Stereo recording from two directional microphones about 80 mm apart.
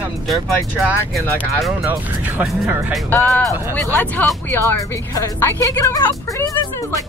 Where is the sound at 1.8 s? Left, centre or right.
Right.